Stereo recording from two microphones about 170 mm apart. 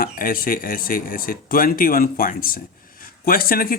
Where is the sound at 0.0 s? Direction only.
55° left (ahead or behind).